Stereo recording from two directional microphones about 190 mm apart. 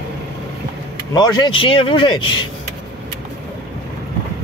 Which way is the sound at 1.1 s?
20° left (ahead or behind).